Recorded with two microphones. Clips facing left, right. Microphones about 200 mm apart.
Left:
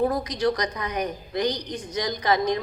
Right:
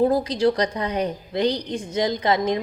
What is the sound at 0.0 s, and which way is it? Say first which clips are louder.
A woman's voice: right 4 dB; 25° right (ahead or behind).